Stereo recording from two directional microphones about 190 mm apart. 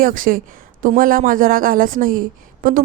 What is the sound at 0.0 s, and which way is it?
A woman's voice, 45° right (ahead or behind).